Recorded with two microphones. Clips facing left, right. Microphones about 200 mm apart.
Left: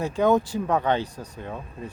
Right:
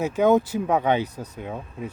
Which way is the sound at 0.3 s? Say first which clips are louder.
Right 2 dB; 20° right (ahead or behind).